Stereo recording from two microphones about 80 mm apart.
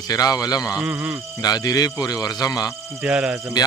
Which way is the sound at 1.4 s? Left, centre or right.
Left.